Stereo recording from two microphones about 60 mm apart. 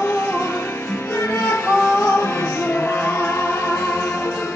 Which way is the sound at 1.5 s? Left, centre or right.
Left.